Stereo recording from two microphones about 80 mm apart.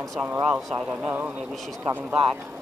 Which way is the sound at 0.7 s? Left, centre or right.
Right.